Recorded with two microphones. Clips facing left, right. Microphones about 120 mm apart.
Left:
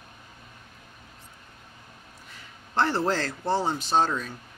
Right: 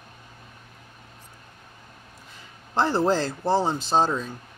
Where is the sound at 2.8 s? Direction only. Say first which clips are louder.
Right 3 dB; 20° right (ahead or behind).